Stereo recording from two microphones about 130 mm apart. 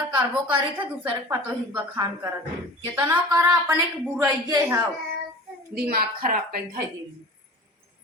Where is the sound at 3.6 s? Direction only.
25° right (ahead or behind).